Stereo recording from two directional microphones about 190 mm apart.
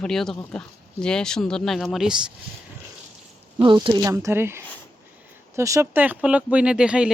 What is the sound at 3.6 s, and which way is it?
Speech, 25° right (ahead or behind).